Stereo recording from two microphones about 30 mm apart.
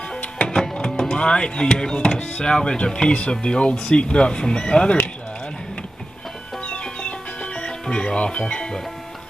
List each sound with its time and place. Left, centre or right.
0.7 s speech: left
6.6 s music: left
7.8 s speech: left